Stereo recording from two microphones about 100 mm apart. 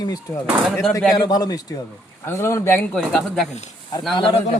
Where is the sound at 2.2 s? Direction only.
25° left (ahead or behind).